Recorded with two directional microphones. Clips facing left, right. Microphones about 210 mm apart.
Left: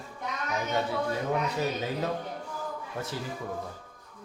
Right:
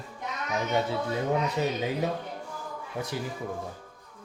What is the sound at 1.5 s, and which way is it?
Speech, 15° right (ahead or behind).